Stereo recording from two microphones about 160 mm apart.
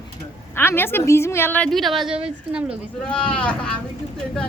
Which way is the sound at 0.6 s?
15° left (ahead or behind).